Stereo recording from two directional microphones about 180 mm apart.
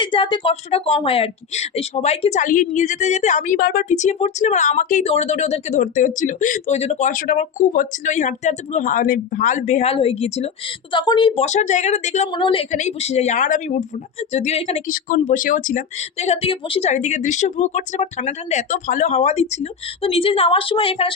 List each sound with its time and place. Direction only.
0.0 s speech: 25° left (ahead or behind); by 3.8 s 55° left (ahead or behind)
3.8 s speech: 40° left (ahead or behind)
12.3 s a woman's voice: 30° left (ahead or behind)
12.7 s speech: 40° left (ahead or behind)